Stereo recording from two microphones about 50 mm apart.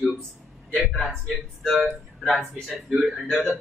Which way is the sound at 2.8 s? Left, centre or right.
Centre.